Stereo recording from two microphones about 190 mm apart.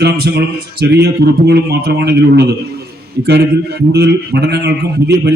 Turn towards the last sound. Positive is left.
turn(degrees=-60)  # may be behind; listen again after turning